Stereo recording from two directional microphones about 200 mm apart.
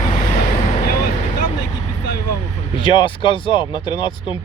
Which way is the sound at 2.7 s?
25° left (ahead or behind).